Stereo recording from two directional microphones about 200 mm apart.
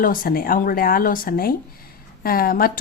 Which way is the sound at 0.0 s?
45° left (ahead or behind).